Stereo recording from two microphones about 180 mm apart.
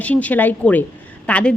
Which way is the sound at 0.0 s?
10° left (ahead or behind).